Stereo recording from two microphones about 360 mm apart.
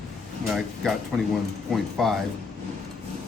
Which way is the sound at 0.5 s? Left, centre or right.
Centre.